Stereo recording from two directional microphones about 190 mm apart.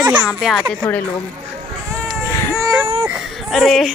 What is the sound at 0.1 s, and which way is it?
Speech, centre (ahead or behind).